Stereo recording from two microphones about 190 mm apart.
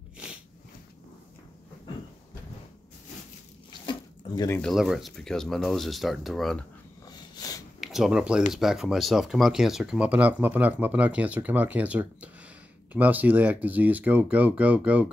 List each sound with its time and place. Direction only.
4.6 s speech: centre (ahead or behind)
7.1 s a sound: 20° left (ahead or behind)
7.8 s speech: centre (ahead or behind)